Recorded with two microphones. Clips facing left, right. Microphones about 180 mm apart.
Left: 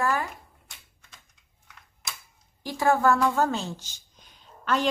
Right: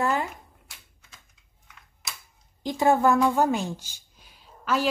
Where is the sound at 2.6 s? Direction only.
20° right (ahead or behind).